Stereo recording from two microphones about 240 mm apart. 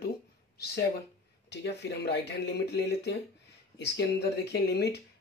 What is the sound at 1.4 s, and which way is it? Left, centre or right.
Speech, left.